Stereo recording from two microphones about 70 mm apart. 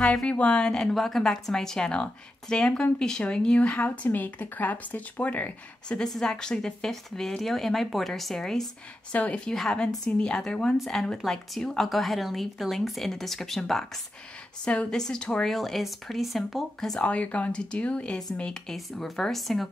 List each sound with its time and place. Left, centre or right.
0.0 s speech: centre
6.0 s speech: centre
9.1 s speech: centre
9.5 s a woman's voice: centre
17.0 s speech: centre